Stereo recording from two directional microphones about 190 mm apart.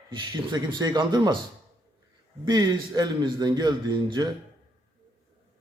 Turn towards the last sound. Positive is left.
turn(degrees=-25)  # may be behind; listen again after turning